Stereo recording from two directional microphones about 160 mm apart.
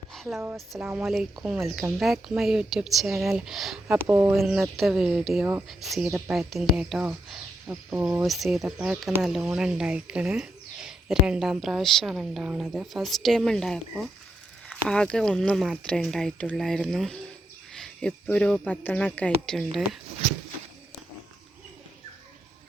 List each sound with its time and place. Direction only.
0.1 s a sound: centre (ahead or behind)
0.3 s speech: 15° right (ahead or behind)
3.9 s speech: 15° right (ahead or behind)
7.7 s speech: 15° right (ahead or behind)
8.2 s speech: centre (ahead or behind)
14.8 s speech: 5° left (ahead or behind)